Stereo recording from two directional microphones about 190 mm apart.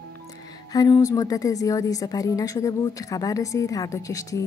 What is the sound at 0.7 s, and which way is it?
A woman's voice, 20° left (ahead or behind).